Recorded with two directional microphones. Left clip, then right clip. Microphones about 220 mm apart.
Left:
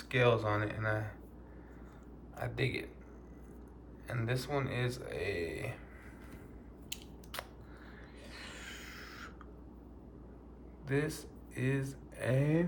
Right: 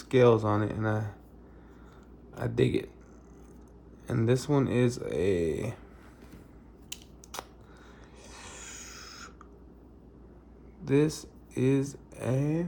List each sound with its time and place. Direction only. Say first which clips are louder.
0.1 s speech: right 7 dB; 25° right (ahead or behind)
2.4 s speech: right 9 dB; 30° right (ahead or behind)
4.0 s speech: right 10 dB; 30° right (ahead or behind)
8.3 s a sound: right 2 dB; 20° right (ahead or behind)
10.8 s speech: right 9 dB; 25° right (ahead or behind)
12.2 s speech: right 2 dB; 10° right (ahead or behind)